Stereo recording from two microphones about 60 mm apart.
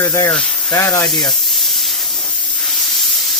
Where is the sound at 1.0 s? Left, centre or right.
Centre.